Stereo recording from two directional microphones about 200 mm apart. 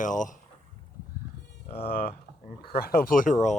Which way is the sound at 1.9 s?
45° left (ahead or behind).